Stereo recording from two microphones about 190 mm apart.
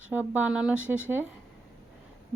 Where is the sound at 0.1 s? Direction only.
10° right (ahead or behind).